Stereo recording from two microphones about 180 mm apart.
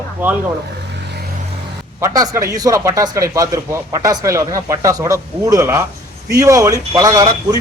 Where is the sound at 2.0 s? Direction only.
20° right (ahead or behind).